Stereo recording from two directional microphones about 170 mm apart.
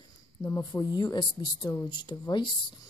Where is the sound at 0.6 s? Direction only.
20° left (ahead or behind).